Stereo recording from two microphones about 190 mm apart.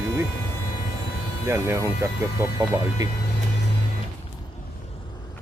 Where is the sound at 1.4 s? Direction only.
15° right (ahead or behind).